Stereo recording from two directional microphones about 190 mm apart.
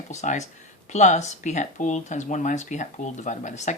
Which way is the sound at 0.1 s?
40° left (ahead or behind).